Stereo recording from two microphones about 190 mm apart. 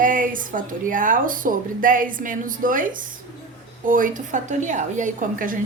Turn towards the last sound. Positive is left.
turn(degrees=-45)  # may be behind; listen again after turning